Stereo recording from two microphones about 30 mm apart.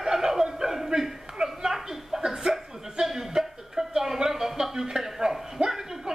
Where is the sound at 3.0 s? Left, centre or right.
Centre.